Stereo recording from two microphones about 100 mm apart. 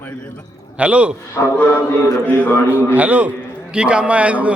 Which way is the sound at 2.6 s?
15° right (ahead or behind).